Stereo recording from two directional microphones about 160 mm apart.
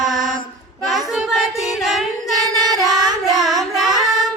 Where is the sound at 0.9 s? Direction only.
Centre (ahead or behind).